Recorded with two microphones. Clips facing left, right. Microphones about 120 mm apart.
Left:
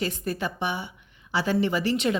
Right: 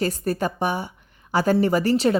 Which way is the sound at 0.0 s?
40° right (ahead or behind).